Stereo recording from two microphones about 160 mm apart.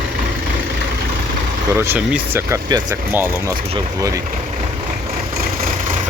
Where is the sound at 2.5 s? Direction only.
20° right (ahead or behind).